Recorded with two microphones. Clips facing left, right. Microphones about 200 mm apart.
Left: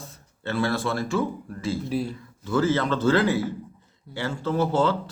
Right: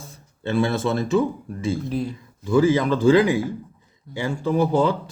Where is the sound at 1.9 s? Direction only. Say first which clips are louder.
Right 1 dB; 5° left (ahead or behind).